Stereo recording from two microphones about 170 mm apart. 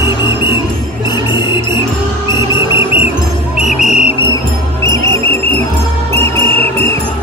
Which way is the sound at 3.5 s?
45° left (ahead or behind).